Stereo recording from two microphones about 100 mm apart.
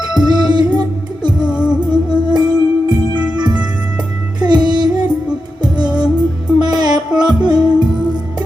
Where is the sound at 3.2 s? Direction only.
10° right (ahead or behind).